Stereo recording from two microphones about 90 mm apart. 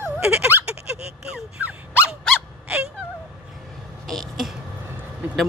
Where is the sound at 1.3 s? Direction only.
10° right (ahead or behind).